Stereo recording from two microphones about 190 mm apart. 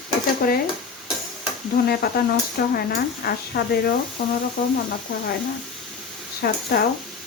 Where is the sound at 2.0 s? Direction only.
55° left (ahead or behind).